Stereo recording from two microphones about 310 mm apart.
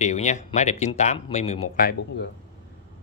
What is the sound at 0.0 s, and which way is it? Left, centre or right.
Speech, left.